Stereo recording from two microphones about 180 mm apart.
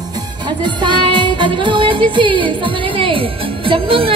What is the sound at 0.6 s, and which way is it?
Music, 25° right (ahead or behind).